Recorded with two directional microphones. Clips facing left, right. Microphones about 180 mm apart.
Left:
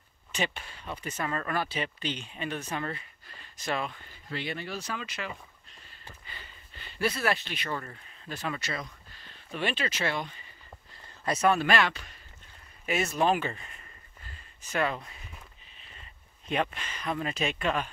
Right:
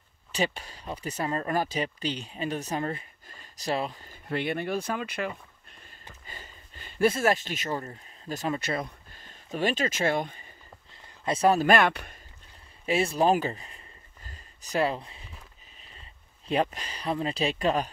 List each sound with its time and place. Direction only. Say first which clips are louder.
0.3 s speech: right 4 dB; 35° right (ahead or behind)
4.3 s speech: right 7 dB; 55° right (ahead or behind)
5.7 s a sound: right 2 dB; 50° right (ahead or behind)
6.2 s speech: right 3 dB; 45° right (ahead or behind)
8.5 s speech: right 6 dB; 55° right (ahead or behind)
11.2 s speech: right 3 dB; 30° right (ahead or behind); by 12.2 s 55° right (ahead or behind)
12.8 s speech: right 3 dB; 30° right (ahead or behind)
14.2 s a sound: right 1 dB; 40° right (ahead or behind)
16.4 s speech: right 3 dB; 35° right (ahead or behind)